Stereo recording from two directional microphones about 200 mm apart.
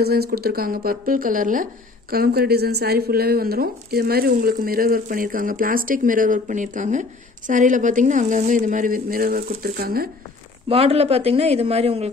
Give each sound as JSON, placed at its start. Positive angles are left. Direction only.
{"t": 0.0, "sound": "speech", "side_deg": -50}
{"t": 10.7, "sound": "speech", "side_deg": -30}